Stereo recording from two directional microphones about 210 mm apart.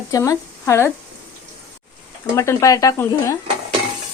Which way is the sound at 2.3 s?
15° left (ahead or behind).